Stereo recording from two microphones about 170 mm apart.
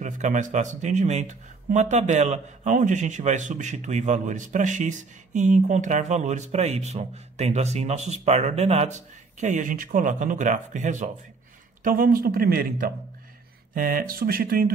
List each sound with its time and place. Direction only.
0.0 s speech: 45° right (ahead or behind)